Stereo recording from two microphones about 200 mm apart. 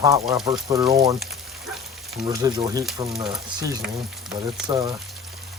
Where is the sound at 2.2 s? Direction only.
20° right (ahead or behind).